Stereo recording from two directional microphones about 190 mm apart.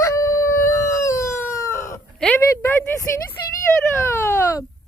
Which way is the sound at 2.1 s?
5° left (ahead or behind).